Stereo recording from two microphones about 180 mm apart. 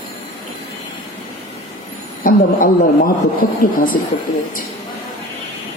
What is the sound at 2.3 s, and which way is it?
Speech, 50° left (ahead or behind).